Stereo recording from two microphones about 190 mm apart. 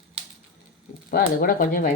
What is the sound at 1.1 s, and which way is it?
Speech, 50° left (ahead or behind).